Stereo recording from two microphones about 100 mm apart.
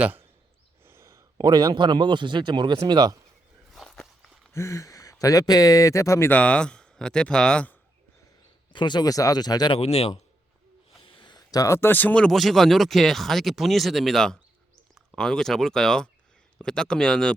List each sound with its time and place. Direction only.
0.0 s a sound: 20° right (ahead or behind)
0.9 s a man's voice: 30° right (ahead or behind); by 3.2 s 45° right (ahead or behind)
3.7 s walk: centre (ahead or behind)
4.5 s speech: 30° left (ahead or behind)
6.3 s speech: 10° left (ahead or behind)
8.7 s speech: 50° left (ahead or behind)
9.7 s speech: 90° left
11.0 s speech: 55° left (ahead or behind); by 17.3 s 5° left (ahead or behind)